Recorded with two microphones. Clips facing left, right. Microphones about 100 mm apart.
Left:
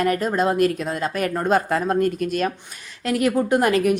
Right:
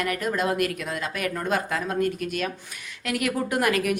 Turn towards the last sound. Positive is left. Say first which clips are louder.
# left 6 dB
turn(degrees=30)  # may be behind; listen again after turning